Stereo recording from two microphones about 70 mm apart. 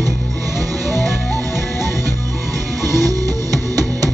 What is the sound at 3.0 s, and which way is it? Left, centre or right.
Music, right.